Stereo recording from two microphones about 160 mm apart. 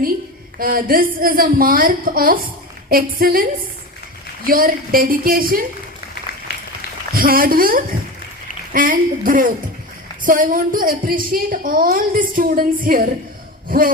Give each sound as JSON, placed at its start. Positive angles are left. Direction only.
{"t": 0.6, "sound": "a woman's voice", "side_deg": -65}
{"t": 4.4, "sound": "a woman's voice", "side_deg": -65}
{"t": 7.1, "sound": "a woman's voice", "side_deg": -65}
{"t": 13.7, "sound": "a sound", "side_deg": -60}